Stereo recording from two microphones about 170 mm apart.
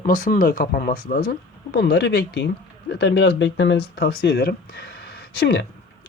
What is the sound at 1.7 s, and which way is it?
Speech, 70° left (ahead or behind).